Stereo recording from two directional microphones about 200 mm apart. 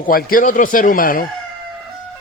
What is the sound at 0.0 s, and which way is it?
Speech, 45° left (ahead or behind).